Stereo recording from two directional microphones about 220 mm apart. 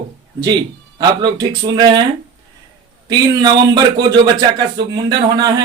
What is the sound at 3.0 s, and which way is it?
Speech, 20° right (ahead or behind).